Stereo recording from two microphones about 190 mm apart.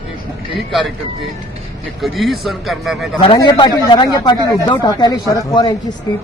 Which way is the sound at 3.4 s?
20° left (ahead or behind).